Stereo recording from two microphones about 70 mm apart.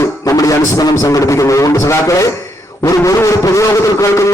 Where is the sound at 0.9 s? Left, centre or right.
Left.